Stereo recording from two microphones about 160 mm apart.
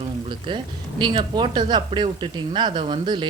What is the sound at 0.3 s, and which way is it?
Speech, 30° right (ahead or behind).